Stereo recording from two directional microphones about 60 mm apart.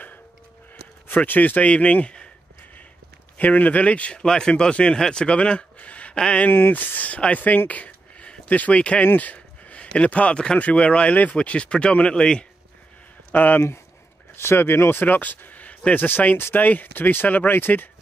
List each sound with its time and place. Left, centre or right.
1.0 s speech: left
3.3 s speech: left
4.2 s speech: centre
6.5 s speech: left; by 12.4 s centre
13.3 s speech: left
14.3 s speech: left